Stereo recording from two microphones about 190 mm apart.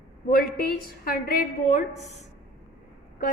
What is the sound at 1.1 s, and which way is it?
A woman's voice, 45° left (ahead or behind).